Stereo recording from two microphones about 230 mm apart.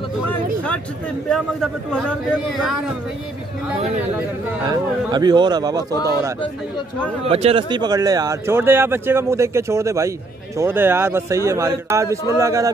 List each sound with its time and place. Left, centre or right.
1.3 s speech: centre
4.6 s speech: centre
7.2 s speech: right